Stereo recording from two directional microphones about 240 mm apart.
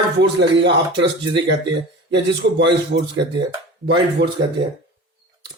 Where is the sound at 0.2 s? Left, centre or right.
Right.